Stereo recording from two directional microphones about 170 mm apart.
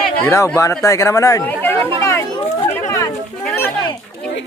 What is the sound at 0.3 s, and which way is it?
Speech, 15° left (ahead or behind).